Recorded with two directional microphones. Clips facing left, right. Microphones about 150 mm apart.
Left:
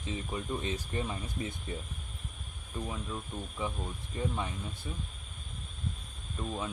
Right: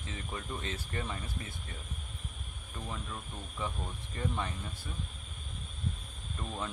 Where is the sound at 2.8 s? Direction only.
10° left (ahead or behind).